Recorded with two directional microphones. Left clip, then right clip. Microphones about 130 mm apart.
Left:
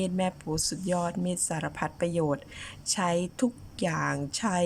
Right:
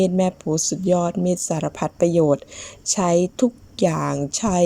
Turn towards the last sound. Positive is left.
turn(degrees=-25)  # may be behind; listen again after turning